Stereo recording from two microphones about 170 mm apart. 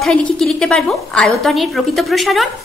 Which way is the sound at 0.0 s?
5° left (ahead or behind).